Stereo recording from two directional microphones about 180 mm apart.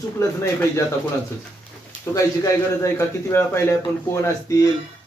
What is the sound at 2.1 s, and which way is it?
A man's voice, 20° left (ahead or behind).